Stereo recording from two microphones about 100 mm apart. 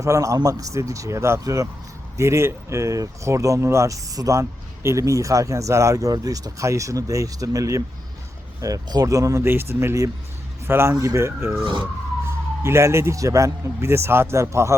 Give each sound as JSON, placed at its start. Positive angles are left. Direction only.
{"t": 0.0, "sound": "a man's voice", "side_deg": -30}
{"t": 12.6, "sound": "a man's voice", "side_deg": -25}